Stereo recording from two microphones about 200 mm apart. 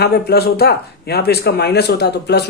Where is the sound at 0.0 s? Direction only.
50° left (ahead or behind).